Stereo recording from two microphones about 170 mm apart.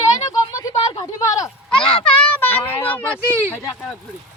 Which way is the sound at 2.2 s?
10° left (ahead or behind).